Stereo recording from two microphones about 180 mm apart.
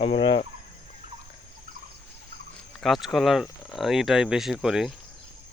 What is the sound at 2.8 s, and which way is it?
Speech, centre (ahead or behind).